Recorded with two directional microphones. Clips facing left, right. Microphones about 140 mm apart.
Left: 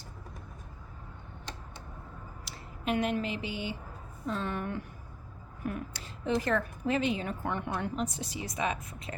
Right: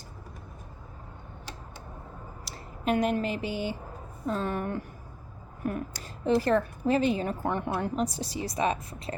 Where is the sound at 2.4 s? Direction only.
40° right (ahead or behind).